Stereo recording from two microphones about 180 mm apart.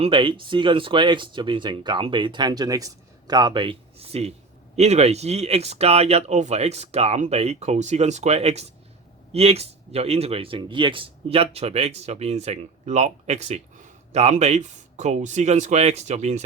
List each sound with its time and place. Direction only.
0.0 s speech: 30° right (ahead or behind)